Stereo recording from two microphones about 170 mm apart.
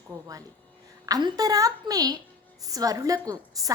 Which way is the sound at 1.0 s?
20° right (ahead or behind).